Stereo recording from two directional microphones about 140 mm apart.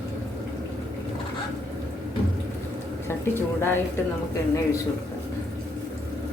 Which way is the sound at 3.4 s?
15° left (ahead or behind).